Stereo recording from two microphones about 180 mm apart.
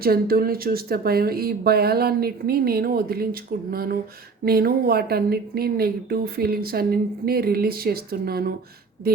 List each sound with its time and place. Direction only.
0.0 s speech: 55° right (ahead or behind)